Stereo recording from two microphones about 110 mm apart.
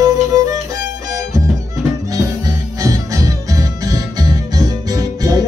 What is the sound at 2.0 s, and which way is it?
Music, 30° right (ahead or behind).